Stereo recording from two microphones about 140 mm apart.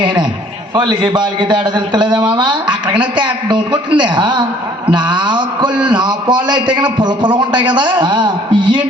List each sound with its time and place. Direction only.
0.0 s a man's voice: 30° right (ahead or behind)